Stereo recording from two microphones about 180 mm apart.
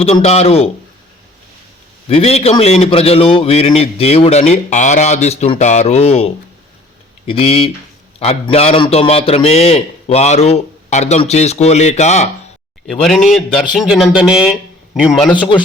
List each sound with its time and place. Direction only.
0.0 s a man's voice: 35° left (ahead or behind)
2.0 s a man's voice: 35° left (ahead or behind)
12.9 s speech: centre (ahead or behind)